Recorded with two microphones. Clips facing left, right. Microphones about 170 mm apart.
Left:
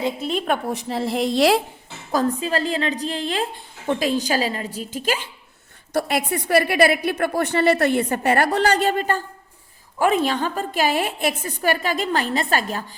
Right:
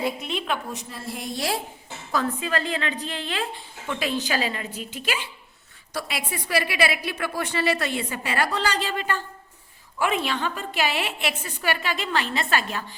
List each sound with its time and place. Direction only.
0.2 s a woman's voice: 40° left (ahead or behind)
0.9 s a woman's voice: 85° left
2.1 s a woman's voice: 35° left (ahead or behind)